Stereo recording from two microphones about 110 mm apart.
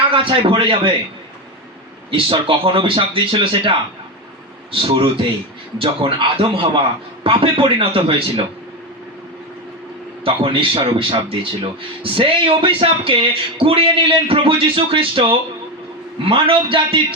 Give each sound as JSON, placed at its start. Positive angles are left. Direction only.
{"t": 0.1, "sound": "a man's voice", "side_deg": -50}
{"t": 2.0, "sound": "a man's voice", "side_deg": -55}
{"t": 10.2, "sound": "a man's voice", "side_deg": -55}